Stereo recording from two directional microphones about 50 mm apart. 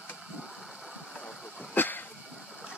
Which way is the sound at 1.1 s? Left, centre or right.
Left.